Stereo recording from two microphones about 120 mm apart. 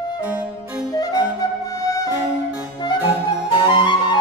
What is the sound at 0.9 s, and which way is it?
Music, 35° left (ahead or behind).